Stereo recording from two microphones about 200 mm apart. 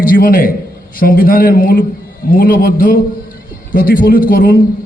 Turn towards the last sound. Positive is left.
turn(degrees=45)  # may be behind; listen again after turning